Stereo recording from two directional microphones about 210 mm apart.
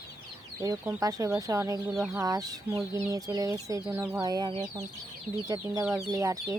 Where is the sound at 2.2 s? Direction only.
15° right (ahead or behind).